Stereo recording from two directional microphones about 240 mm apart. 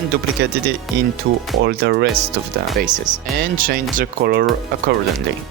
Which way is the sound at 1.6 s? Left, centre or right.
Right.